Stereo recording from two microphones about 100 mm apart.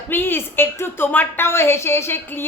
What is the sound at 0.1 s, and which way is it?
Speech, 20° left (ahead or behind).